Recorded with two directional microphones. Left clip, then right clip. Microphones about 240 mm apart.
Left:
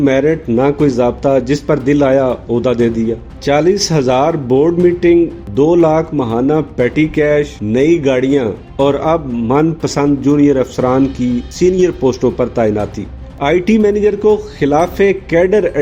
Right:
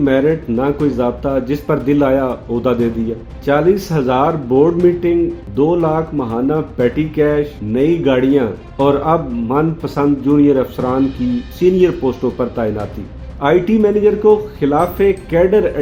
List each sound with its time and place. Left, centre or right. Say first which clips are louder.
0.0 s speech: left 2 dB; left